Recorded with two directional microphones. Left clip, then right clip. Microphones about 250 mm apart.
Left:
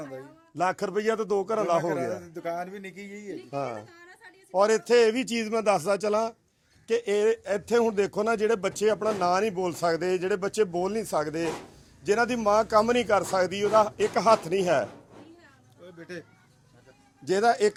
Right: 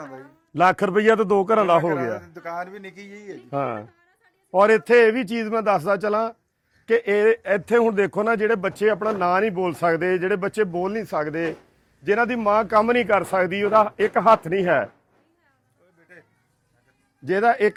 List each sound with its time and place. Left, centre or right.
0.5 s a man's voice: right
2.2 s speech: centre; by 3.3 s right
3.5 s speech: right
3.9 s a sound: left
4.5 s speech: right
5.1 s speech: centre
6.8 s speech: right
7.8 s speech: centre
16.0 s a sound: left
17.2 s speech: centre